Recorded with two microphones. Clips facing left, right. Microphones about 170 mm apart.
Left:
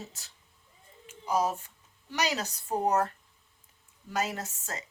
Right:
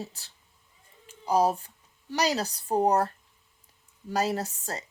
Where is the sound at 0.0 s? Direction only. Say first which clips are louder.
Right 6 dB; 35° right (ahead or behind).